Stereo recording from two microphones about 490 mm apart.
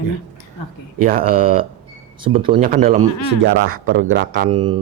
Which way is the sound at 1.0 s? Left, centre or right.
Centre.